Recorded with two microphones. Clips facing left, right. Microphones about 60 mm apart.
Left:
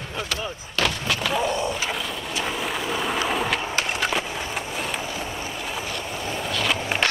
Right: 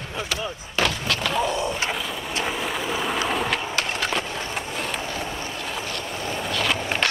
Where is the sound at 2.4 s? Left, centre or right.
Centre.